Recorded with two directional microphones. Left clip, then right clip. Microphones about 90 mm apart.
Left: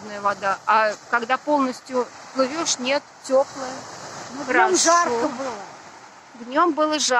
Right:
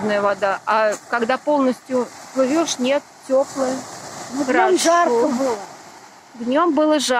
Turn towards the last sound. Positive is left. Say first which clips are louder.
# right 3 dB
turn(degrees=-35)  # may be behind; listen again after turning